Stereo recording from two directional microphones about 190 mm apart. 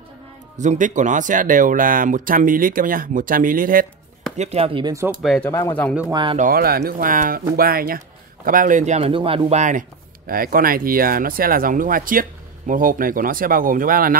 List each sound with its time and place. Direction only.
0.6 s speech: 40° right (ahead or behind)
4.4 s speech: 30° right (ahead or behind)
5.2 s speech: centre (ahead or behind)
6.0 s speech: 20° right (ahead or behind)
6.3 s speech: 50° right (ahead or behind)